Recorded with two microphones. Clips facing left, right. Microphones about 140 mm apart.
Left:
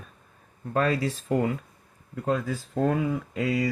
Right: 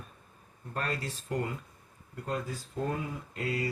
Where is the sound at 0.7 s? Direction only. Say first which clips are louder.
Left 10 dB; 90° left.